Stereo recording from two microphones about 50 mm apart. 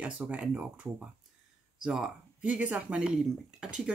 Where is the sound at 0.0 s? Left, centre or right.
Right.